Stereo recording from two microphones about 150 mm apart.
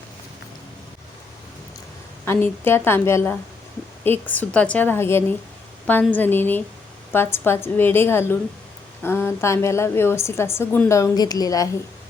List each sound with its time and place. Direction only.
2.2 s a woman's voice: 15° left (ahead or behind)